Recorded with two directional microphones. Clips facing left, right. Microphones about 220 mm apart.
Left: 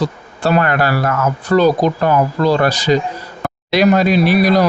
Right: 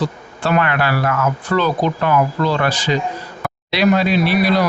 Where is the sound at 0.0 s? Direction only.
40° left (ahead or behind).